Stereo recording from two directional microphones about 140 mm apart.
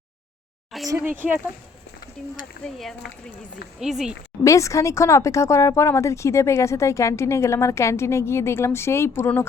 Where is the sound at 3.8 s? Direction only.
5° right (ahead or behind).